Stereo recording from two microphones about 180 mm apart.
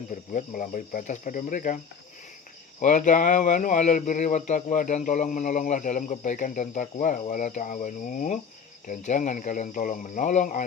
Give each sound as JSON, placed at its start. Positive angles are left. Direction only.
{"t": 0.1, "sound": "speech", "side_deg": 45}
{"t": 2.8, "sound": "speech", "side_deg": 45}